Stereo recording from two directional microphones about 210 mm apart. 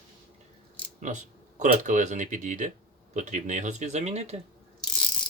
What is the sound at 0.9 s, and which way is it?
Speech, 35° right (ahead or behind).